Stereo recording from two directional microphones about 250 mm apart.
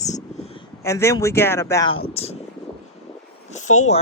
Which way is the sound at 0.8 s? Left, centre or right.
Centre.